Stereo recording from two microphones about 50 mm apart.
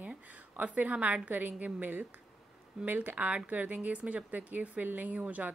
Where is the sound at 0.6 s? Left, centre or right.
Right.